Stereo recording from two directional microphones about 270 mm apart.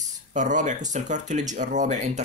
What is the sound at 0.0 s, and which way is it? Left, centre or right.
Speech, right.